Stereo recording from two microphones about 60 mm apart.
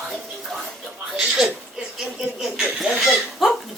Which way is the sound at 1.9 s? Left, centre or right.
Centre.